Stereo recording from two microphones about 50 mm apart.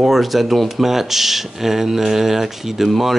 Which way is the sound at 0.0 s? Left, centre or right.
Centre.